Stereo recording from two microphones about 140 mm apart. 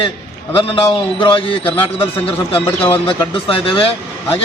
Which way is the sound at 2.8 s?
40° left (ahead or behind).